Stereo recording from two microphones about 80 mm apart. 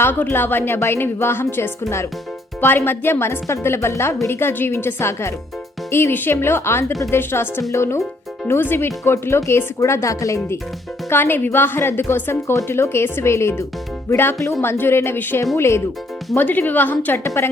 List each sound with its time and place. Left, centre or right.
0.0 s a woman's voice: left
11.1 s a woman's voice: left
16.4 s a woman's voice: left
17.2 s speech: left